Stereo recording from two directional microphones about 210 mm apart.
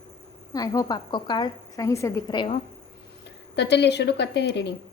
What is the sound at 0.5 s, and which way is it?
A woman's voice, 15° left (ahead or behind).